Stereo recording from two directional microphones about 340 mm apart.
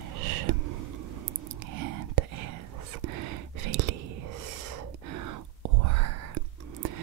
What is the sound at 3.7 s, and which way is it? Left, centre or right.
Whispering, right.